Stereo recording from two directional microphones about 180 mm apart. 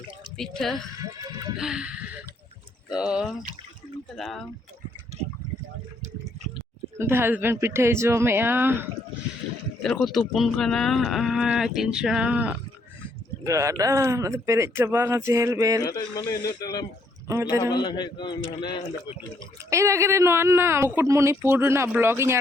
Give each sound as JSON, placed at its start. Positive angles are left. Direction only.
{"t": 0.3, "sound": "speech", "side_deg": 0}
{"t": 1.2, "sound": "music", "side_deg": -20}
{"t": 1.5, "sound": "speech", "side_deg": -5}
{"t": 7.0, "sound": "speech", "side_deg": -15}
{"t": 9.8, "sound": "speech", "side_deg": 0}
{"t": 13.4, "sound": "speech", "side_deg": -15}
{"t": 15.8, "sound": "a man's voice", "side_deg": 20}
{"t": 17.2, "sound": "speech", "side_deg": -15}
{"t": 17.6, "sound": "a man's voice", "side_deg": 25}
{"t": 19.7, "sound": "speech", "side_deg": -15}